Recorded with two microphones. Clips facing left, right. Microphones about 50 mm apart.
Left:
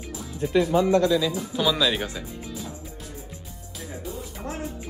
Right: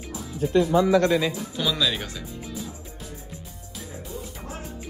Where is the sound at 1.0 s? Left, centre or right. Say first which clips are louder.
Even; right.